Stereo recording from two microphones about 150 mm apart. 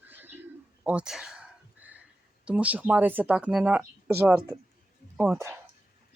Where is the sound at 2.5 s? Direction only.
10° right (ahead or behind).